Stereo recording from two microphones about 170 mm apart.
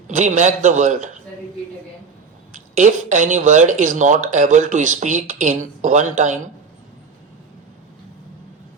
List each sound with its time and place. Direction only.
0.1 s speech: 45° right (ahead or behind)
2.7 s speech: 45° right (ahead or behind)